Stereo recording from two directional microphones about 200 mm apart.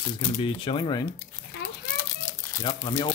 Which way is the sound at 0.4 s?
25° left (ahead or behind).